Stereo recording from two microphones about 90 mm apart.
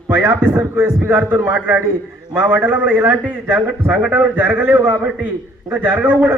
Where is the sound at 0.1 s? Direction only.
25° right (ahead or behind).